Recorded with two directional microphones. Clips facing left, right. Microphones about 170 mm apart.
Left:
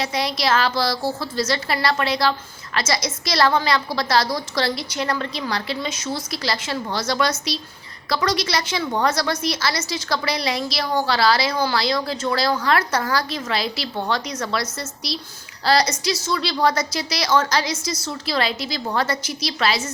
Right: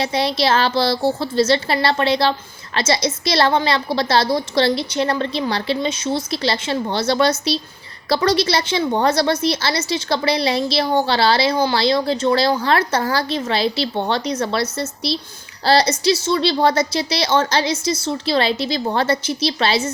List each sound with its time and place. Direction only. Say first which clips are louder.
0.0 s a woman's voice: right 4 dB; 30° right (ahead or behind)